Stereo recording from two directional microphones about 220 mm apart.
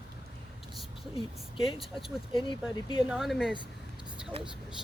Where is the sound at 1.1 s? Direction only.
25° left (ahead or behind).